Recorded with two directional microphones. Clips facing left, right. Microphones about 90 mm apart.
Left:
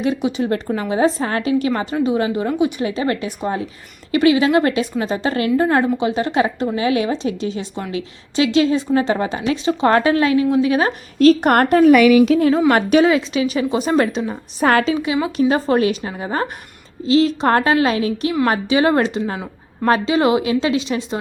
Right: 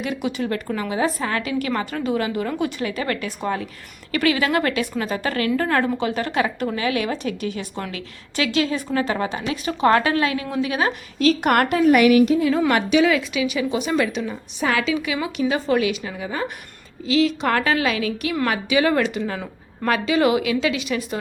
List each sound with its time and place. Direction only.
0.0 s a woman's voice: 25° left (ahead or behind)
2.5 s a woman's voice: 15° left (ahead or behind)
15.4 s a woman's voice: 40° left (ahead or behind)